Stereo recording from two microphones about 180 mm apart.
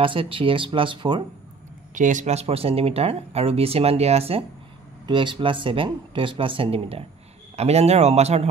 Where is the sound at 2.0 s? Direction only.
45° right (ahead or behind).